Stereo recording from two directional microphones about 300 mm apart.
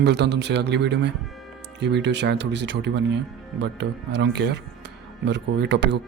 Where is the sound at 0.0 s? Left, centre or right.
Right.